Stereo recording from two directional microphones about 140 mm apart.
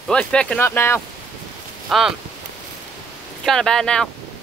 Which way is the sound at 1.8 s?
Centre (ahead or behind).